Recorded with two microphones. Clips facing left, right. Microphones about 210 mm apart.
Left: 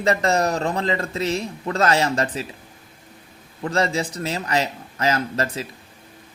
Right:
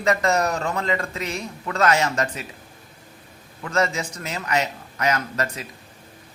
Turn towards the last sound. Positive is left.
turn(degrees=30)  # may be behind; listen again after turning